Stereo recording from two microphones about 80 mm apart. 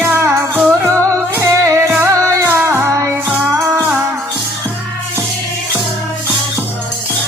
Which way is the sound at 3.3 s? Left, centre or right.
Right.